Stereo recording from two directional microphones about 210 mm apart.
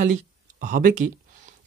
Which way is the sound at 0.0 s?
35° right (ahead or behind).